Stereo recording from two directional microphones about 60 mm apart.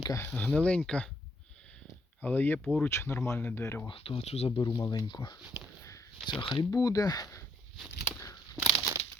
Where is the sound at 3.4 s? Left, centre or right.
Left.